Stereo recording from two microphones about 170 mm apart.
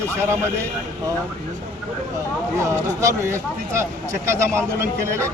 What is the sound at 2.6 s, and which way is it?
Speech, 15° right (ahead or behind).